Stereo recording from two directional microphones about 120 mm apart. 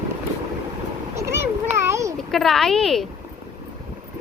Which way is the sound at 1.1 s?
25° right (ahead or behind).